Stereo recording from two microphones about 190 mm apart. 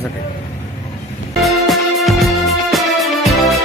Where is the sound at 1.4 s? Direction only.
Centre (ahead or behind).